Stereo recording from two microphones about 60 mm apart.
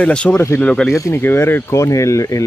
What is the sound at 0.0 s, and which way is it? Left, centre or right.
Speech, centre.